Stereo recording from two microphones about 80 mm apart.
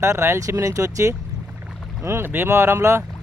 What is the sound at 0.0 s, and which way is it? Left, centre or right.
Speech, right.